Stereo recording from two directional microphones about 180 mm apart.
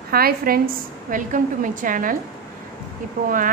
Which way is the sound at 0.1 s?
55° right (ahead or behind).